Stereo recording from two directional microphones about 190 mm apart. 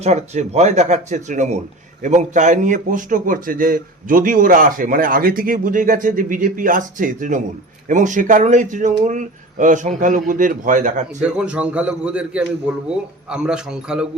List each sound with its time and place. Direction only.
0.0 s a man's voice: 35° right (ahead or behind)
11.2 s a man's voice: 5° right (ahead or behind)